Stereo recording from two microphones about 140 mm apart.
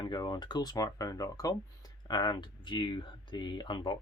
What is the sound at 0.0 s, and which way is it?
Speech, 30° left (ahead or behind).